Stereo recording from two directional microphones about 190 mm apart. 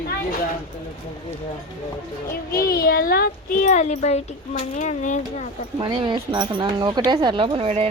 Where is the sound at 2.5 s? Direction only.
50° left (ahead or behind).